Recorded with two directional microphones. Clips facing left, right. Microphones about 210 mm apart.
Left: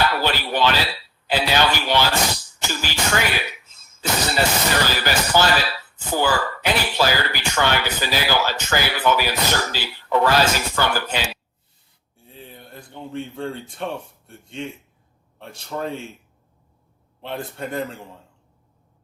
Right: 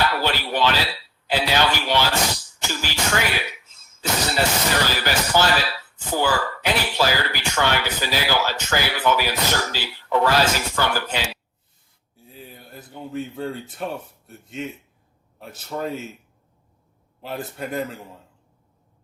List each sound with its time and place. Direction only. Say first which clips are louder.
0.0 s a man's voice: left 1 dB; 50° left (ahead or behind)
12.1 s a man's voice: even; 5° right (ahead or behind)
17.2 s a man's voice: left 1 dB; 5° right (ahead or behind)